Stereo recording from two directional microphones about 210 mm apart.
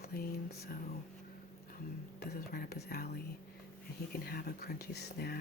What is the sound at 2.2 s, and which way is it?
Speech, 45° left (ahead or behind).